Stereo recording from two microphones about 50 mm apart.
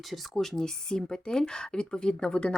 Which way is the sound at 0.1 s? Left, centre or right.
Centre.